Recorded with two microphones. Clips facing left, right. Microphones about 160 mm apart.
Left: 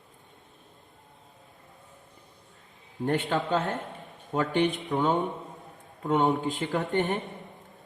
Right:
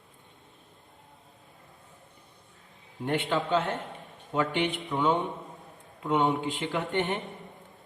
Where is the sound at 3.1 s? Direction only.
40° left (ahead or behind).